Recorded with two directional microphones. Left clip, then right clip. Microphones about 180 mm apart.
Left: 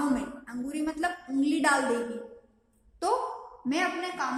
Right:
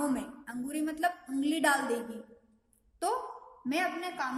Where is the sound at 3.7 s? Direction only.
45° right (ahead or behind).